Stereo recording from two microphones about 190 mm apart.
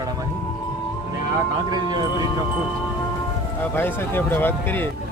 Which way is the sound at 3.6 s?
10° left (ahead or behind).